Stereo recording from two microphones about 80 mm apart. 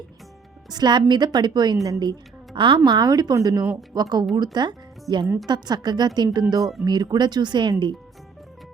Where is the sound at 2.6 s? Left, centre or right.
Right.